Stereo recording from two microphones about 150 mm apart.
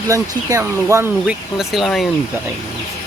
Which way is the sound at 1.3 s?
Centre (ahead or behind).